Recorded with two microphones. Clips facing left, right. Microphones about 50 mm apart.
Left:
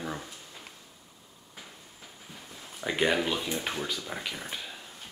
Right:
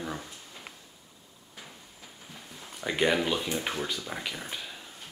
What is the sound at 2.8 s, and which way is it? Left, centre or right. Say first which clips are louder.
Speech: right 1 dB; centre.